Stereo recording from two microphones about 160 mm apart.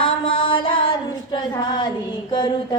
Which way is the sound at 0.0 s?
35° left (ahead or behind).